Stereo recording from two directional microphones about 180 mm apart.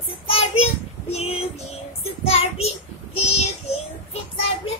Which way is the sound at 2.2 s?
35° left (ahead or behind).